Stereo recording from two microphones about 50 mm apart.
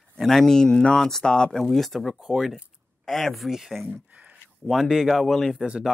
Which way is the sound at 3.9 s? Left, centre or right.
Right.